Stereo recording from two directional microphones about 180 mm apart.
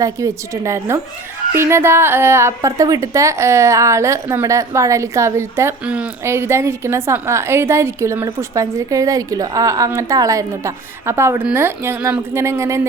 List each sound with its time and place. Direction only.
0.0 s a woman's voice: 15° right (ahead or behind)